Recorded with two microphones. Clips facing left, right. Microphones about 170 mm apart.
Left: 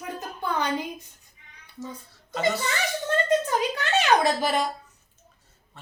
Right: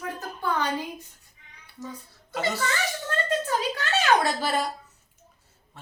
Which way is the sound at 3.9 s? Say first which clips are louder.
Left 1 dB; 15° left (ahead or behind).